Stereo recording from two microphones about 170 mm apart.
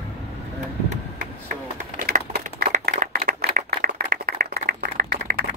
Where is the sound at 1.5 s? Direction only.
60° right (ahead or behind).